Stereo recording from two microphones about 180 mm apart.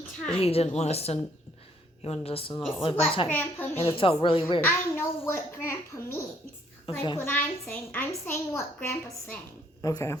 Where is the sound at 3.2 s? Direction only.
10° left (ahead or behind).